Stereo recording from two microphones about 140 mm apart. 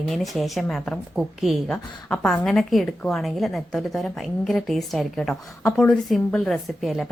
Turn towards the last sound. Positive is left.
turn(degrees=0)  # may be behind; listen again after turning